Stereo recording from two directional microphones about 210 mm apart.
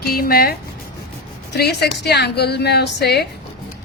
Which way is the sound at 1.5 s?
50° left (ahead or behind).